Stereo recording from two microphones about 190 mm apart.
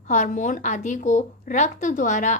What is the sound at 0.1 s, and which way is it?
A woman's voice, 40° left (ahead or behind).